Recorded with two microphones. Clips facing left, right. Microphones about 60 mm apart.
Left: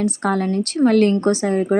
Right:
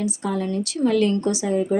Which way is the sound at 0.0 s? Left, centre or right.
Left.